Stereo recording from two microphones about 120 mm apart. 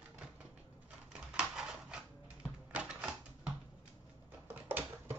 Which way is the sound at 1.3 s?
5° right (ahead or behind).